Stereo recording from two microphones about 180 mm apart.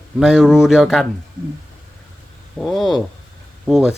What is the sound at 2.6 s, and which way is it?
Speech, centre (ahead or behind).